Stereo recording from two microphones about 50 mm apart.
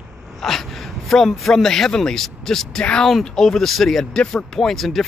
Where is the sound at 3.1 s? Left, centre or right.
Centre.